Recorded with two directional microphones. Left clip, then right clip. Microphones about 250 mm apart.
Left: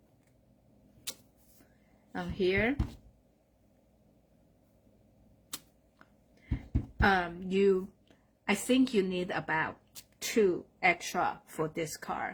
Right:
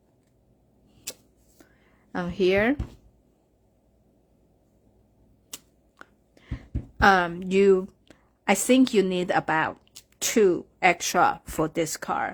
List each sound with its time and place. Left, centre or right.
2.1 s speech: right
7.0 s a woman's voice: right